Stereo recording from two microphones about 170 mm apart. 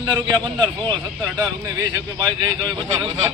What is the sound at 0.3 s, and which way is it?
Speech, 25° right (ahead or behind).